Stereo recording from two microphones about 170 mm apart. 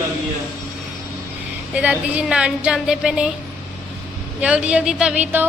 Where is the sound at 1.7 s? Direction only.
10° right (ahead or behind).